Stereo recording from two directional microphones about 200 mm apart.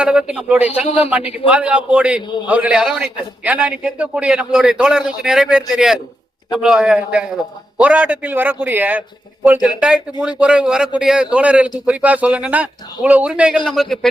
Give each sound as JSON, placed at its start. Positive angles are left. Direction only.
{"t": 0.0, "sound": "a man's voice", "side_deg": -5}
{"t": 0.9, "sound": "a man's voice", "side_deg": 30}
{"t": 1.5, "sound": "a man's voice", "side_deg": -5}